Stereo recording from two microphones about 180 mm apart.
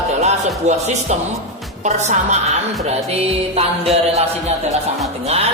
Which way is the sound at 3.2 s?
35° right (ahead or behind).